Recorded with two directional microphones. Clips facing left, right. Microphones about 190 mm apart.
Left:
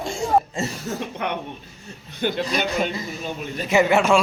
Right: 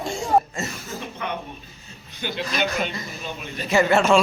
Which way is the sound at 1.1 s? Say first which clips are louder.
Even; 60° left (ahead or behind).